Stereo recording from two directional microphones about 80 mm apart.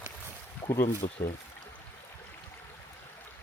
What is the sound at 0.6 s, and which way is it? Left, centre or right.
Speech, left.